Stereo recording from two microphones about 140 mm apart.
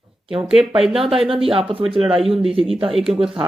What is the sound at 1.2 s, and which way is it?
Speech, 40° right (ahead or behind).